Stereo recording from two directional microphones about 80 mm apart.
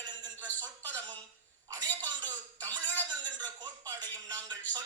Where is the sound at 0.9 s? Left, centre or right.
Right.